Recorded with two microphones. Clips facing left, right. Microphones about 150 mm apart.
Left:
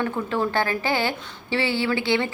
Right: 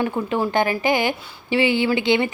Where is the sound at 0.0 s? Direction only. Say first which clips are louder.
Right 3 dB; 15° right (ahead or behind).